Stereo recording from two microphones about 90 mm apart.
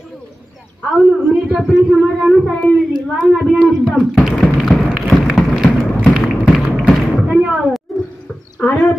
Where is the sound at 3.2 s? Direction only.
10° right (ahead or behind).